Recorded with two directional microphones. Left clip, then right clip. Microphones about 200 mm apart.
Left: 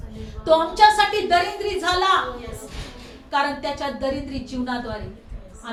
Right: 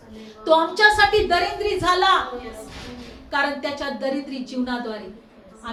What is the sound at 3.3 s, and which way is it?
Speech, 10° right (ahead or behind).